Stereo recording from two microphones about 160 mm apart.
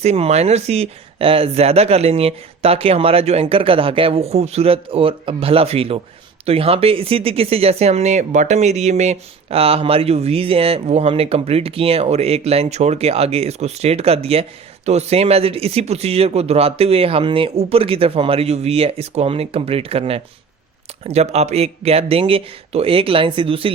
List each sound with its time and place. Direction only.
0.0 s speech: 40° right (ahead or behind)